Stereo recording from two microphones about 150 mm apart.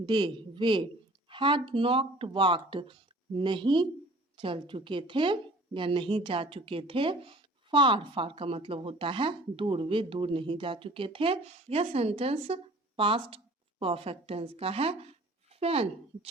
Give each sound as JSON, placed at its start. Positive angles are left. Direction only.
{"t": 0.0, "sound": "speech", "side_deg": -35}